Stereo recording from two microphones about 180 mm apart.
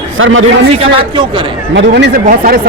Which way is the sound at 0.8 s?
25° right (ahead or behind).